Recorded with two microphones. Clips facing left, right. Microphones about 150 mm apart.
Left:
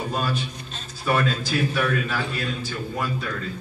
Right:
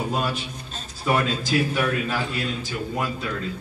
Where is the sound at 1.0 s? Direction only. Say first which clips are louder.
Even; 20° right (ahead or behind).